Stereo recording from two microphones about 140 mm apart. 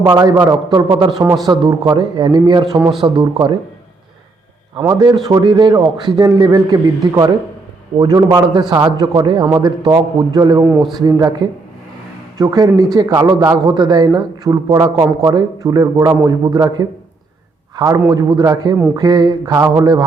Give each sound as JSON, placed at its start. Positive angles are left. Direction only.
{"t": 0.0, "sound": "a man's voice", "side_deg": -25}
{"t": 4.8, "sound": "a man's voice", "side_deg": -25}